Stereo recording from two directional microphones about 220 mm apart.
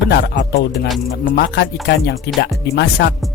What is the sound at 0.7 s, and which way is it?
Speech, centre (ahead or behind).